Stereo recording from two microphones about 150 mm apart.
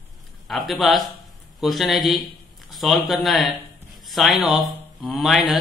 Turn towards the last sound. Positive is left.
turn(degrees=0)  # may be behind; listen again after turning